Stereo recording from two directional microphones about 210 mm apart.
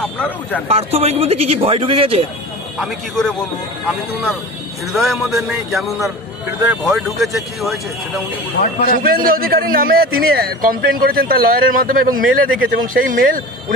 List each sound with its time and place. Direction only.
0.0 s speech: 5° left (ahead or behind)
0.7 s speech: 30° right (ahead or behind)
2.8 s a man's voice: centre (ahead or behind)
4.9 s a man's voice: centre (ahead or behind)
9.0 s a man's voice: 45° right (ahead or behind)